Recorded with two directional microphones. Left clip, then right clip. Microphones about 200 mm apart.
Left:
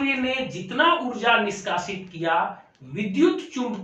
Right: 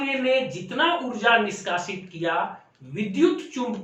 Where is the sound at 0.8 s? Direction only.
10° left (ahead or behind).